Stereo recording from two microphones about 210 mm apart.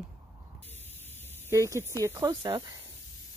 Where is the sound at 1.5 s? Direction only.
15° right (ahead or behind).